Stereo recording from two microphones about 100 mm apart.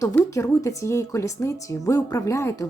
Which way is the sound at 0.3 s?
30° left (ahead or behind).